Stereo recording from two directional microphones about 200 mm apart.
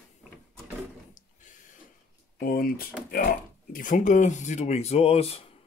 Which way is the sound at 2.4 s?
50° left (ahead or behind).